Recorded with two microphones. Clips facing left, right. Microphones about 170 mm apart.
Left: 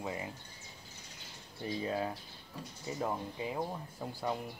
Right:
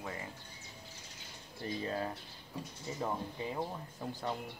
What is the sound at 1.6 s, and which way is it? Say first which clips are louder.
Speech: left 2 dB; 10° left (ahead or behind).